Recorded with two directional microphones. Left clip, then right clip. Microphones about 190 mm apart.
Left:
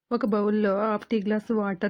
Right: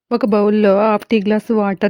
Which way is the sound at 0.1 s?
35° right (ahead or behind).